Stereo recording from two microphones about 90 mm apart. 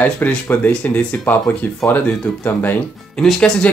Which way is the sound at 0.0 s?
20° left (ahead or behind).